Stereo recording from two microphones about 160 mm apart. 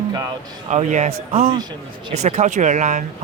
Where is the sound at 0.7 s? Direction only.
50° right (ahead or behind).